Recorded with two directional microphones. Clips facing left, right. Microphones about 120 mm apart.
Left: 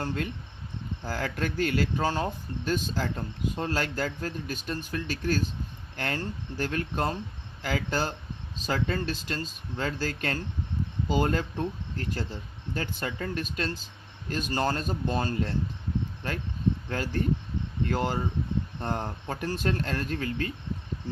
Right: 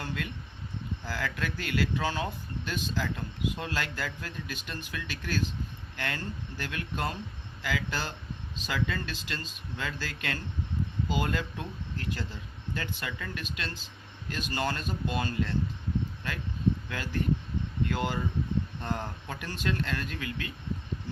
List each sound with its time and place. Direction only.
0.0 s speech: 40° left (ahead or behind)
16.9 s speech: 45° left (ahead or behind)